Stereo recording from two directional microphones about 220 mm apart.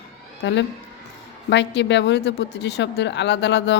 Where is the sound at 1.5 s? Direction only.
55° left (ahead or behind).